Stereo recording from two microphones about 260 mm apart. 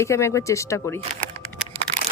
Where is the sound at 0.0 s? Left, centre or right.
Centre.